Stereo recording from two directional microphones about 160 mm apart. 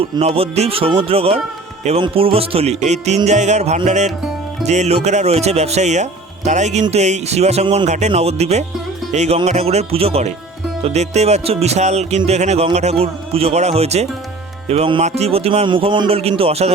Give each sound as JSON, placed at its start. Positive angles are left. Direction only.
{"t": 0.0, "sound": "speech", "side_deg": -40}
{"t": 3.2, "sound": "music", "side_deg": -45}
{"t": 14.7, "sound": "speech", "side_deg": -35}